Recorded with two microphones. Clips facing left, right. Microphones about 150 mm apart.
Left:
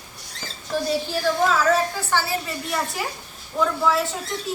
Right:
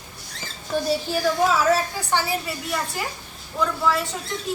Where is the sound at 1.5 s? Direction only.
15° right (ahead or behind).